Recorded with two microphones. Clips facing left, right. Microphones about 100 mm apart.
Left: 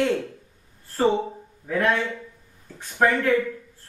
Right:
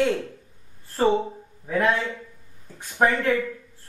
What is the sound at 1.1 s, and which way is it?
Speech, 20° right (ahead or behind).